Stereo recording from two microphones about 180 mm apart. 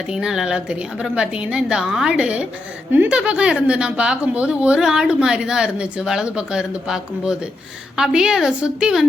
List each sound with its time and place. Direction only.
0.1 s a woman's voice: 5° right (ahead or behind)